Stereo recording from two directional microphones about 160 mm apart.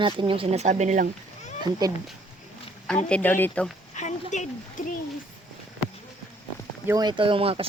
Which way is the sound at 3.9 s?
50° left (ahead or behind).